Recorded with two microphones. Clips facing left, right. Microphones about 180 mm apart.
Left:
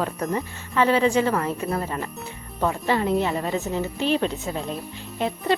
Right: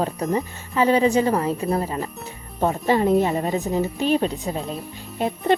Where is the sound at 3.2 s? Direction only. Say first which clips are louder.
Right 3 dB; 15° right (ahead or behind).